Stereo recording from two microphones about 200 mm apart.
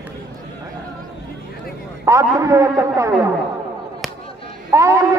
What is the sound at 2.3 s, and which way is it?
Speech, 15° right (ahead or behind).